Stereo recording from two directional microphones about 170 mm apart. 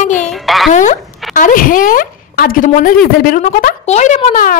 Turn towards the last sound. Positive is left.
turn(degrees=50)  # may be behind; listen again after turning